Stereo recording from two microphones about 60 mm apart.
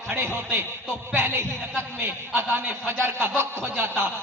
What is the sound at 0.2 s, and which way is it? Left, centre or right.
A man's voice, right.